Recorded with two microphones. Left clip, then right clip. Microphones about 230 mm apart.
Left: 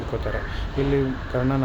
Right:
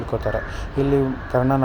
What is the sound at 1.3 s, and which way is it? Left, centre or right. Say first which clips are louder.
Speech: right 5 dB; centre.